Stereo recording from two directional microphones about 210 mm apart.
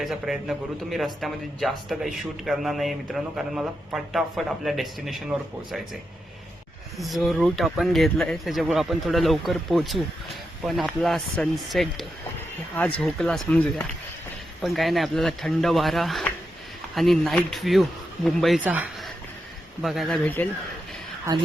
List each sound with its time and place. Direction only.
0.0 s a man's voice: centre (ahead or behind)
7.0 s a man's voice: centre (ahead or behind)